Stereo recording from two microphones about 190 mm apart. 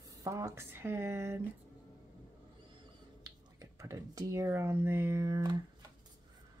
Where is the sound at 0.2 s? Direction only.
15° right (ahead or behind).